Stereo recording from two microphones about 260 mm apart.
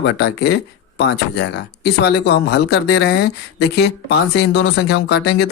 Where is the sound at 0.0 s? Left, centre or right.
Left.